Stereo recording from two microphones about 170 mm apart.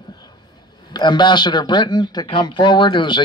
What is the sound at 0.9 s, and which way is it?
A man's voice, 25° left (ahead or behind).